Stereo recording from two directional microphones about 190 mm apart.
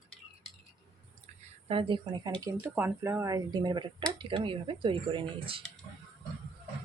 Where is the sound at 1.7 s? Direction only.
25° right (ahead or behind).